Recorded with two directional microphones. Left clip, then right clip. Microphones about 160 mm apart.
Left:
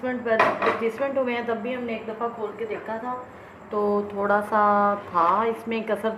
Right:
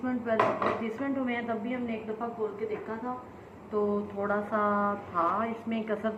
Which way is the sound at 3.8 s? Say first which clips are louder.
Left 6 dB; 60° left (ahead or behind).